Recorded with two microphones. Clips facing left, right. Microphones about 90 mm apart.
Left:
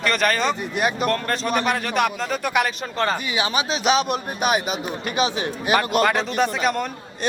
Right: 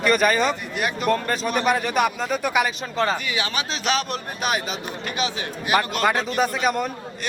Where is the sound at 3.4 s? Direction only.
15° left (ahead or behind).